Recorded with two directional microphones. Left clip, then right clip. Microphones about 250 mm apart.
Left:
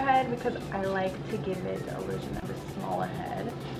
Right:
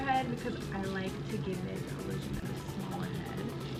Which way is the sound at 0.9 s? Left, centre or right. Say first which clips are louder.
Left 8 dB; centre.